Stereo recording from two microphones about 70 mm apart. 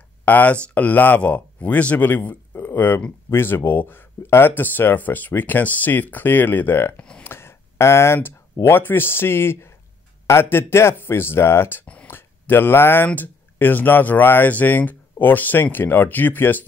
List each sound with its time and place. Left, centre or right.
0.2 s speech: left
7.0 s speech: centre
7.2 s a sound: left
8.6 s speech: left
11.8 s a sound: centre
12.1 s speech: left